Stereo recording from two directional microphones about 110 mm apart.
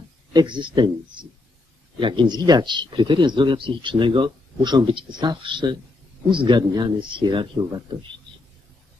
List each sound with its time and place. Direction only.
0.3 s speech: 45° right (ahead or behind)
2.0 s speech: 45° right (ahead or behind)